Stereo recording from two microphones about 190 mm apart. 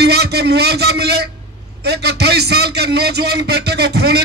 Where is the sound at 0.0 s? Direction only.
60° right (ahead or behind).